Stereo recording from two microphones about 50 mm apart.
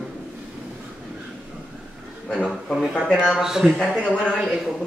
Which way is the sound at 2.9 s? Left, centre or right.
Centre.